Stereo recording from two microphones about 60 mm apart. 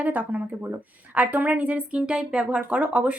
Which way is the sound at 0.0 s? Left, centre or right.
Right.